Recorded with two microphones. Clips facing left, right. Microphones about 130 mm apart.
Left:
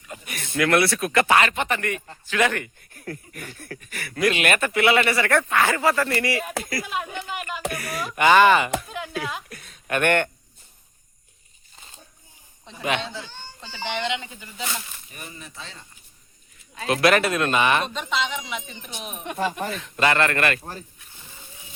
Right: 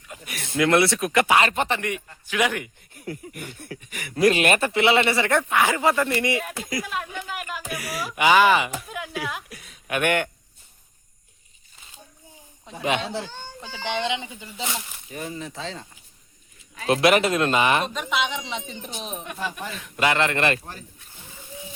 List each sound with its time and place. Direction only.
0.1 s a sound: centre (ahead or behind)
0.5 s speech: 20° right (ahead or behind)
1.4 s speech: 30° right (ahead or behind)
2.2 s speech: 10° right (ahead or behind)
4.2 s speech: 35° right (ahead or behind); by 6.8 s 15° right (ahead or behind)
6.8 s a sound: centre (ahead or behind)
7.7 s speech: 5° right (ahead or behind)
13.6 s speech: 20° right (ahead or behind)
15.1 s speech: 90° right
16.8 s speech: 30° right (ahead or behind)
17.8 s speech: 5° right (ahead or behind)
18.4 s speech: 30° right (ahead or behind)
19.2 s speech: 25° left (ahead or behind)
19.8 s speech: 10° right (ahead or behind)